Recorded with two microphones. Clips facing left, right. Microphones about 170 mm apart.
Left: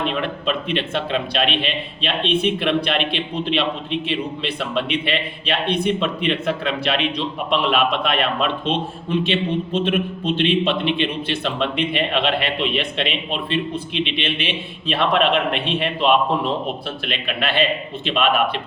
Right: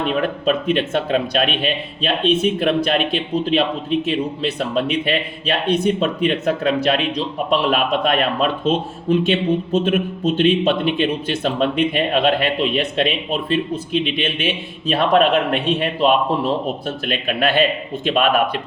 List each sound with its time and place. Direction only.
0.1 s a man's voice: 45° right (ahead or behind)